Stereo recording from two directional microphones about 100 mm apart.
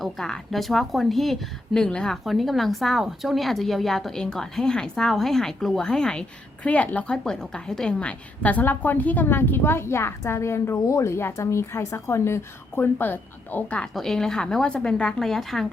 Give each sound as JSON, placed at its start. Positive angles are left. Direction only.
{"t": 0.0, "sound": "a woman's voice", "side_deg": 0}
{"t": 13.9, "sound": "a woman's voice", "side_deg": 5}